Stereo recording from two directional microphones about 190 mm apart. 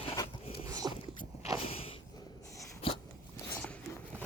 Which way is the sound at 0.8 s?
20° right (ahead or behind).